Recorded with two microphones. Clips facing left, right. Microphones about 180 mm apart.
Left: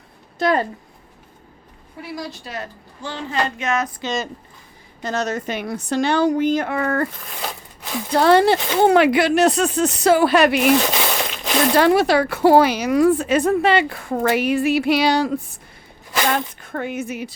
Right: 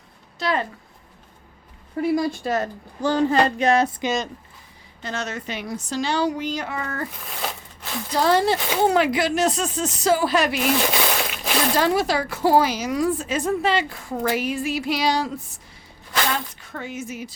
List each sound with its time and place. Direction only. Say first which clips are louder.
0.3 s speech: left 5 dB; 50° left (ahead or behind)
2.0 s a woman's voice: right 10 dB; 45° right (ahead or behind)
5.0 s speech: left 6 dB; 40° left (ahead or behind); by 7.1 s 60° left (ahead or behind)
8.1 s speech: left 5 dB; 65° left (ahead or behind)
10.9 s a sound: left 1 dB; 5° right (ahead or behind)
11.7 s speech: left 6 dB; 65° left (ahead or behind)